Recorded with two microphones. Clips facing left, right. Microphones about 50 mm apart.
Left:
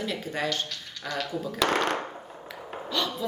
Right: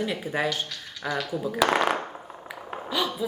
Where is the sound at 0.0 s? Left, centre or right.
Centre.